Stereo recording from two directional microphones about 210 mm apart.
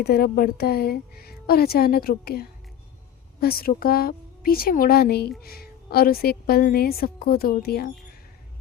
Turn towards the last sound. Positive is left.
turn(degrees=45)  # may be behind; listen again after turning